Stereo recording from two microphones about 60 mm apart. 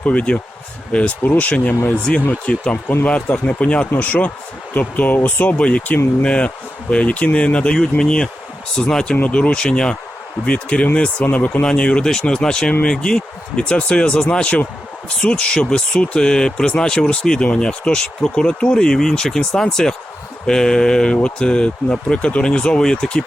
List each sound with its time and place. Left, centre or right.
0.0 s speech: left
2.1 s speech: centre
11.6 s speech: centre